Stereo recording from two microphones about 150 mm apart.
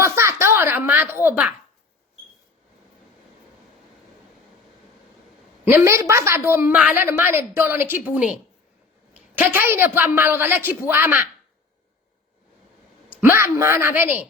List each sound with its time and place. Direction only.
0.0 s a sound: 20° right (ahead or behind)
1.2 s a woman's voice: 10° right (ahead or behind)
5.6 s a woman's voice: 20° right (ahead or behind)
13.1 s a woman's voice: 15° right (ahead or behind)